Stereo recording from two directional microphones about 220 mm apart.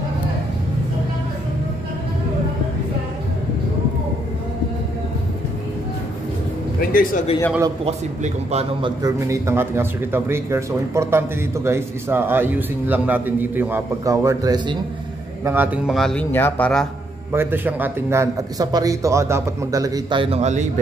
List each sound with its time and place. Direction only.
6.8 s speech: 40° left (ahead or behind)
7.8 s a man's voice: 30° right (ahead or behind)
9.0 s speech: 10° right (ahead or behind); by 16.8 s 5° left (ahead or behind)
17.3 s speech: 10° right (ahead or behind); by 20.6 s 30° right (ahead or behind)